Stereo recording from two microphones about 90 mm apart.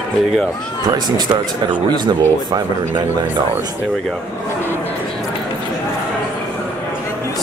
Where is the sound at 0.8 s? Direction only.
55° right (ahead or behind).